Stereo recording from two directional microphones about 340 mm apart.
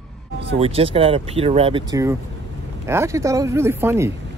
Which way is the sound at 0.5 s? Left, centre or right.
Centre.